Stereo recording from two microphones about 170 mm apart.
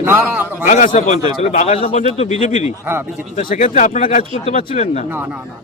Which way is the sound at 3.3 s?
50° left (ahead or behind).